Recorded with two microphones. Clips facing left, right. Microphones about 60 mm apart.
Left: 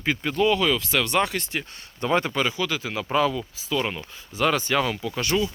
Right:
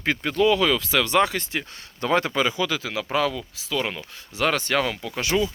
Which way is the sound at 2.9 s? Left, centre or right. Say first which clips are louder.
Left 3 dB; right.